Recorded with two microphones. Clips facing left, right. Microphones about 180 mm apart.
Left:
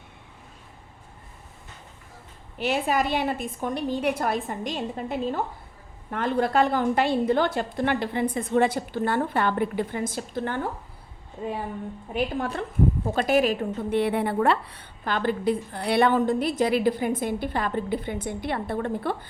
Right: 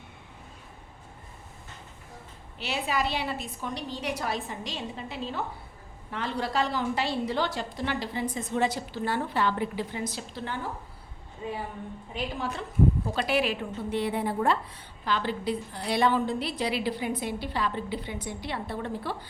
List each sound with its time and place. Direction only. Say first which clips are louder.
2.6 s a woman's voice: left 6 dB; 50° left (ahead or behind)
12.1 s a woman's voice: left 6 dB; 55° left (ahead or behind)
14.0 s a woman's voice: left 4 dB; 65° left (ahead or behind)